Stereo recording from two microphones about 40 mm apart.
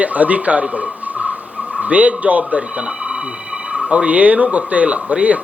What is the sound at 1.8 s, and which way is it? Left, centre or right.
Speech, right.